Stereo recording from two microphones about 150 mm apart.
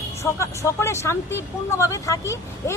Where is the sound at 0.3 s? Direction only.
20° left (ahead or behind).